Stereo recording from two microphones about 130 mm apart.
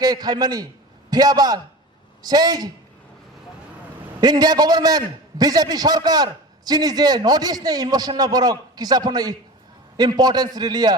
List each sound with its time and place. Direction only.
0.0 s a man's voice: 30° right (ahead or behind)
4.2 s a man's voice: 30° right (ahead or behind)